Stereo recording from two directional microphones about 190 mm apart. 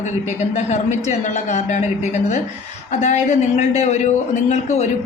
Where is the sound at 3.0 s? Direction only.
40° left (ahead or behind).